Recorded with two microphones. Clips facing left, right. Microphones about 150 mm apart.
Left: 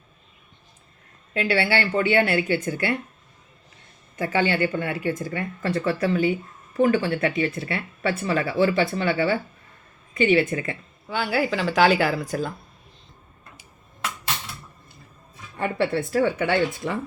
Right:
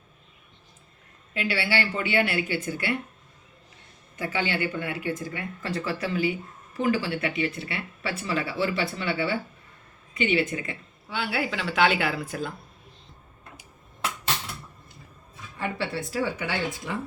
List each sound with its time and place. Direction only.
1.3 s speech: 50° left (ahead or behind)
4.2 s speech: 45° left (ahead or behind)
15.5 s speech: 50° left (ahead or behind)